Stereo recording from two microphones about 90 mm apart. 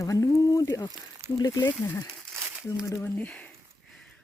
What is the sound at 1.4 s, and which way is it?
Speech, 45° left (ahead or behind).